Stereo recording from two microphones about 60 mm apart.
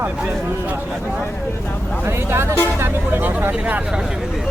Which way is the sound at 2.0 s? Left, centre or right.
Right.